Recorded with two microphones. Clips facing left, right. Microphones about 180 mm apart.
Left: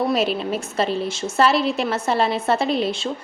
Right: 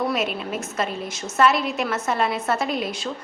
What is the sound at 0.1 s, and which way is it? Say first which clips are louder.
A woman's voice: left 4 dB; 30° left (ahead or behind).